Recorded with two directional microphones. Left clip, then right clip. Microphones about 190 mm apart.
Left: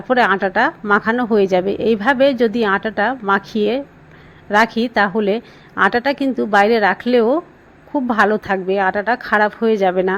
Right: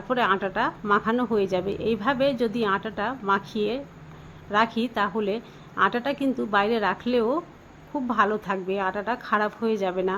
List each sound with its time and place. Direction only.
0.1 s a woman's voice: 20° left (ahead or behind)